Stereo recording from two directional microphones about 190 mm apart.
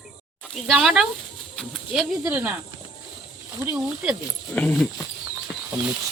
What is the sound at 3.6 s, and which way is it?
Speech, 5° right (ahead or behind).